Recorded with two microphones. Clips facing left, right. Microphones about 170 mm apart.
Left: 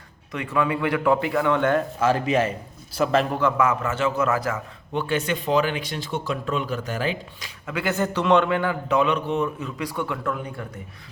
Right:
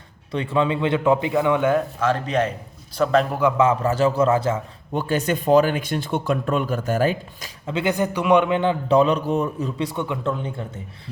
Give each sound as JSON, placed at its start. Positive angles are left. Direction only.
{"t": 0.3, "sound": "a man's voice", "side_deg": -30}
{"t": 2.0, "sound": "speech", "side_deg": 5}
{"t": 3.6, "sound": "a man's voice", "side_deg": -30}
{"t": 4.9, "sound": "speech", "side_deg": -40}
{"t": 7.7, "sound": "a man's voice", "side_deg": -20}